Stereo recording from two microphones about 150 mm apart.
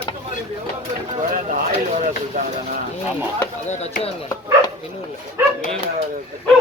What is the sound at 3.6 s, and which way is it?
Speech, 50° left (ahead or behind).